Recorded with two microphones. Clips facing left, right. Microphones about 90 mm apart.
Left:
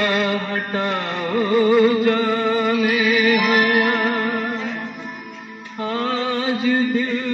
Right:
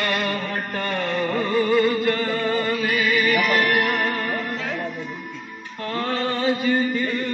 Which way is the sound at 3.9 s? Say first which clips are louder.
Left 3 dB; 90° left.